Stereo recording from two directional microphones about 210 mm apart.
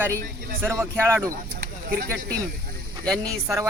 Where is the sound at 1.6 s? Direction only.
45° right (ahead or behind).